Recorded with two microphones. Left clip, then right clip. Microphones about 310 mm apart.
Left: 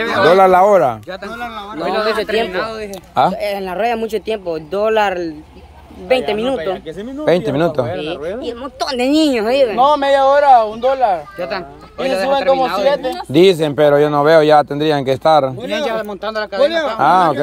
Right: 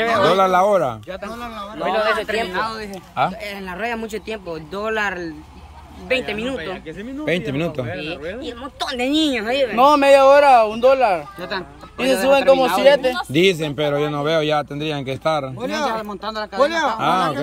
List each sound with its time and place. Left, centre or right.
0.0 s a man's voice: centre
1.9 s a man's voice: left
3.2 s a man's voice: centre
9.8 s speech: right
13.3 s a man's voice: centre
16.9 s a man's voice: centre